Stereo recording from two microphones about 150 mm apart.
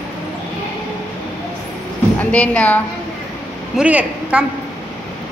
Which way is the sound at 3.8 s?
10° right (ahead or behind).